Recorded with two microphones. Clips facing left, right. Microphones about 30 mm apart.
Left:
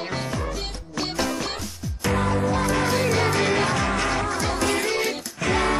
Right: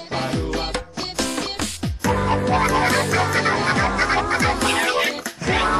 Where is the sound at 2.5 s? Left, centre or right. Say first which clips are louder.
Right 4 dB; right.